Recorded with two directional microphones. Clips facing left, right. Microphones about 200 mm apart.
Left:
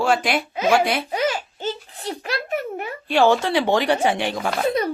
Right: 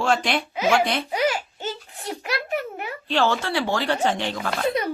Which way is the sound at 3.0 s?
15° left (ahead or behind).